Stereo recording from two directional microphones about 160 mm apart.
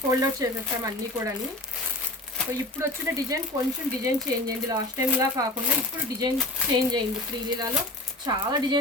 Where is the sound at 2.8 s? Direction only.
20° right (ahead or behind).